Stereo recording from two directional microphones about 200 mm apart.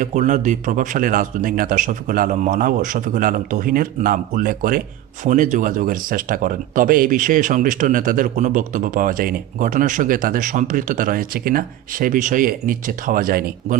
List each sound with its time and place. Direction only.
0.0 s speech: 40° right (ahead or behind)